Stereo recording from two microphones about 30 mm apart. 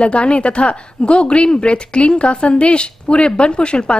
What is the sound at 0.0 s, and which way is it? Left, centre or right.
A woman's voice, left.